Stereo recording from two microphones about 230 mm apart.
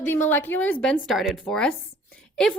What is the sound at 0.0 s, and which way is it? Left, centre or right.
A woman's voice, centre.